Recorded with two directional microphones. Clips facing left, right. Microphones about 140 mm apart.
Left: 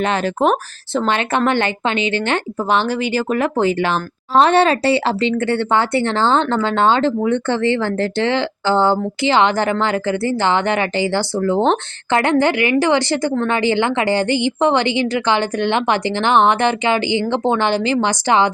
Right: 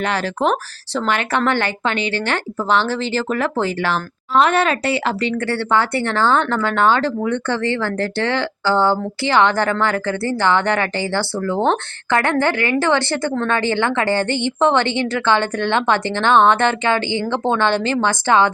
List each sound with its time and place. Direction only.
0.0 s speech: 20° left (ahead or behind)
4.4 s speech: 30° left (ahead or behind)